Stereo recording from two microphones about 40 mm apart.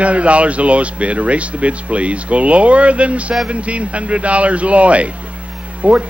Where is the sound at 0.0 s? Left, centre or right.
Right.